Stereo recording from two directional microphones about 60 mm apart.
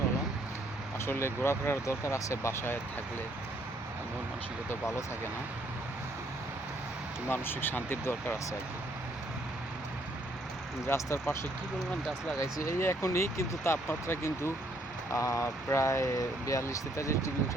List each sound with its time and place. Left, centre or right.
0.9 s speech: left
4.7 s speech: left
7.3 s speech: left
10.8 s speech: left
12.4 s speech: left
12.8 s speech: left
15.1 s speech: left